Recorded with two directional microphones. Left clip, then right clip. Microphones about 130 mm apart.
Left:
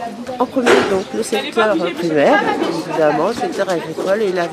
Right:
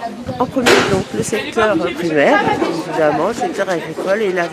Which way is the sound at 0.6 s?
35° right (ahead or behind).